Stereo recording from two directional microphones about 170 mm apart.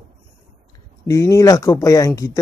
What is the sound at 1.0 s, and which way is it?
Speech, 20° left (ahead or behind).